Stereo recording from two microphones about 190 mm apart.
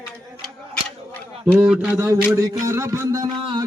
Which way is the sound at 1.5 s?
5° right (ahead or behind).